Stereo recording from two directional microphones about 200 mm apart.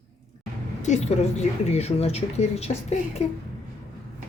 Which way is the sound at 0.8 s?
35° left (ahead or behind).